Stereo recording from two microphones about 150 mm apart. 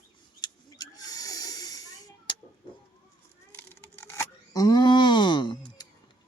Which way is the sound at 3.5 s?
15° left (ahead or behind).